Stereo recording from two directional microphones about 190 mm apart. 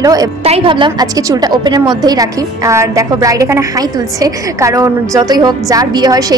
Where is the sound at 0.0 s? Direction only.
20° right (ahead or behind).